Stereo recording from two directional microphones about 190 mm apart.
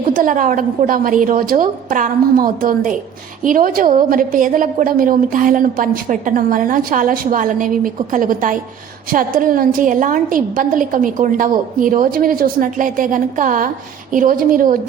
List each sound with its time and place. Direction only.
0.0 s a woman's voice: 45° right (ahead or behind)